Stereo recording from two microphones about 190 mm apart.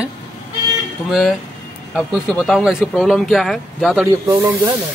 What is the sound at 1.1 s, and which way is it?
Speech, centre (ahead or behind).